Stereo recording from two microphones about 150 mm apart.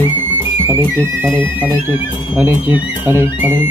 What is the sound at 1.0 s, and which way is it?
Speech, 15° right (ahead or behind).